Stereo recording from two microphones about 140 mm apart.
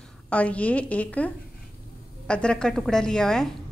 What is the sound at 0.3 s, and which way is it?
A woman's voice, 10° left (ahead or behind).